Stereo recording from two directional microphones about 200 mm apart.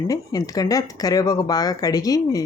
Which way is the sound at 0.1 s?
15° left (ahead or behind).